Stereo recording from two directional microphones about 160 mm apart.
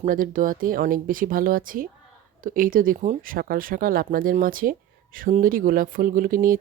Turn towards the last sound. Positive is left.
turn(degrees=-60)  # may be behind; listen again after turning